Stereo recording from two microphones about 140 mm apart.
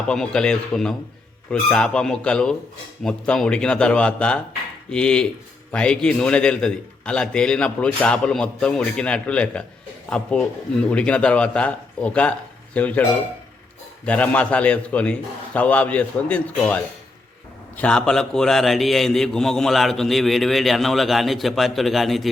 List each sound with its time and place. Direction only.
0.1 s a man's voice: 5° left (ahead or behind)